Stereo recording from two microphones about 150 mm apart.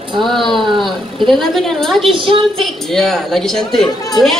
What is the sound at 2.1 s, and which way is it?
Speech, 35° right (ahead or behind).